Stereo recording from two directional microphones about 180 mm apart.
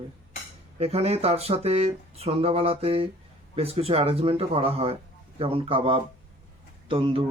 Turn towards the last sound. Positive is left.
turn(degrees=-30)  # may be behind; listen again after turning